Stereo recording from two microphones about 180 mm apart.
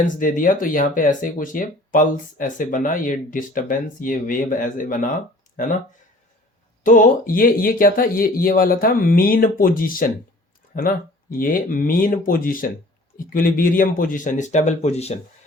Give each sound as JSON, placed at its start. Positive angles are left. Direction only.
{"t": 0.2, "sound": "speech", "side_deg": 45}
{"t": 6.8, "sound": "speech", "side_deg": 45}